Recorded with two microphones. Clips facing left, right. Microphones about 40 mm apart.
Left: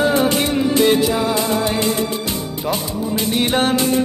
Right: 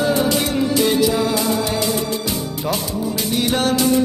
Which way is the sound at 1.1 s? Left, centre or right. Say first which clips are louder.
Even; centre.